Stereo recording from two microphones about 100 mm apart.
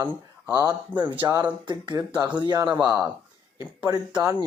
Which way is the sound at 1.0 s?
40° right (ahead or behind).